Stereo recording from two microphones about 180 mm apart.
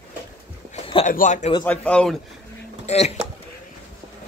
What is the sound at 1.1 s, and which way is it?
Speech, 45° left (ahead or behind).